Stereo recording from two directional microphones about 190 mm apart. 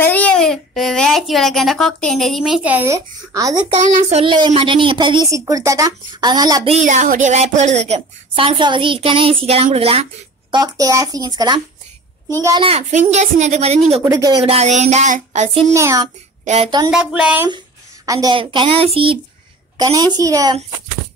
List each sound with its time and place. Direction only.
0.0 s a child's voice: 10° left (ahead or behind); by 3.7 s 20° right (ahead or behind)
3.8 s a woman's voice: 30° right (ahead or behind)
6.7 s a woman's voice: 40° right (ahead or behind)
10.5 s a woman's voice: 20° right (ahead or behind)
12.6 s a woman's voice: 30° right (ahead or behind)
14.1 s a child's voice: 20° right (ahead or behind)
14.4 s a woman's voice: 35° right (ahead or behind)
15.7 s a child's voice: 15° right (ahead or behind)
16.4 s speech: 35° right (ahead or behind)
16.9 s a child's voice: 5° right (ahead or behind)
18.0 s a woman's voice: 20° right (ahead or behind)